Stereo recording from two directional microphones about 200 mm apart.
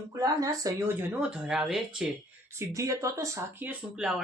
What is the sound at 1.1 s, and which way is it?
Speech, 5° right (ahead or behind).